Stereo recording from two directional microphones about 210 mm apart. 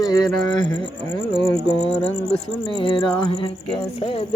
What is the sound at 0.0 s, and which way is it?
Speech, 20° left (ahead or behind).